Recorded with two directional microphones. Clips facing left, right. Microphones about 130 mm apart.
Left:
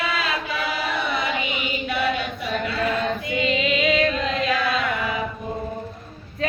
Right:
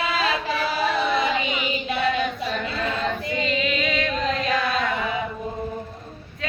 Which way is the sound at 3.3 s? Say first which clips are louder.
Left 4 dB; 35° right (ahead or behind).